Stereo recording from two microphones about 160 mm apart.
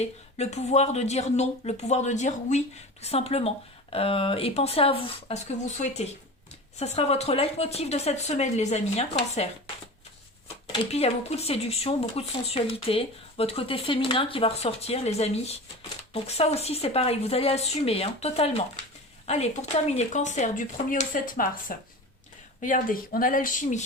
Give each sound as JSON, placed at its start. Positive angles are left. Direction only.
{"t": 0.0, "sound": "speech", "side_deg": 45}
{"t": 10.9, "sound": "speech", "side_deg": 40}